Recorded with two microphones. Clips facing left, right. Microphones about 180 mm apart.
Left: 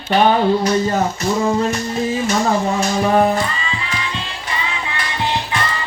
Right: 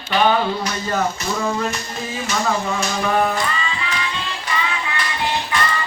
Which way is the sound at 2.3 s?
40° left (ahead or behind).